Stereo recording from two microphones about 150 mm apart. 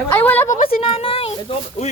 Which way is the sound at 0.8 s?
40° left (ahead or behind).